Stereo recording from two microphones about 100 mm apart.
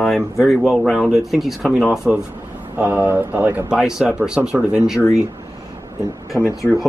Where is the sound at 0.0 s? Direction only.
Centre (ahead or behind).